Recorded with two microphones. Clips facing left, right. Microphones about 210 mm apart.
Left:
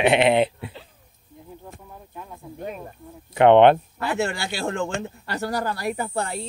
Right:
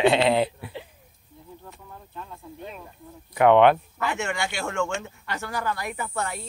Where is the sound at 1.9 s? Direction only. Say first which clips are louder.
Right 2 dB; 15° left (ahead or behind).